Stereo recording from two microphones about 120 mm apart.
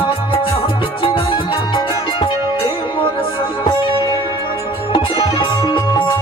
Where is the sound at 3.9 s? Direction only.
45° left (ahead or behind).